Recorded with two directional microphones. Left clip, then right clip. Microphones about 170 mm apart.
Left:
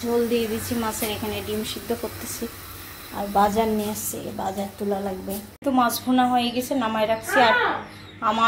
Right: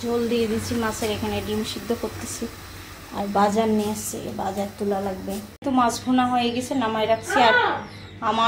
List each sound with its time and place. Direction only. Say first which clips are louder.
0.1 s a woman's voice: left 1 dB; centre (ahead or behind)
3.2 s a woman's voice: even; centre (ahead or behind)